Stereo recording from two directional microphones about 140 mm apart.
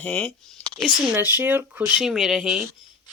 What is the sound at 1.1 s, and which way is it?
Speech, 15° right (ahead or behind).